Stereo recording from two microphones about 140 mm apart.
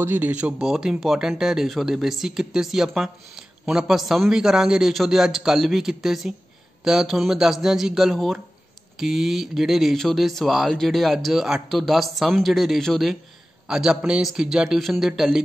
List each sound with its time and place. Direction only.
0.0 s speech: 15° right (ahead or behind)